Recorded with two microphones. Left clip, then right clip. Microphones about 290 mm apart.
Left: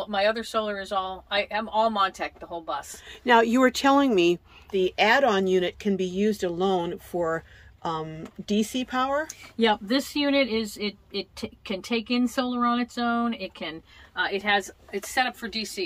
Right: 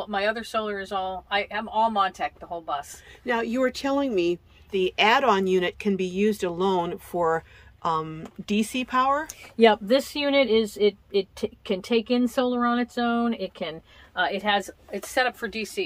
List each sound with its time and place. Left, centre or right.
0.0 s speech: centre
3.3 s speech: centre
4.6 s speech: centre
9.3 s speech: right; by 15.8 s centre